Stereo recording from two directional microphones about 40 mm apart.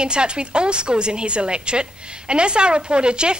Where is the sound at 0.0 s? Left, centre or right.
Right.